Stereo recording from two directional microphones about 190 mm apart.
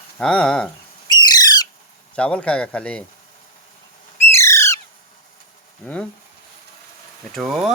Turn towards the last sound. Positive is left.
turn(degrees=0)  # may be behind; listen again after turning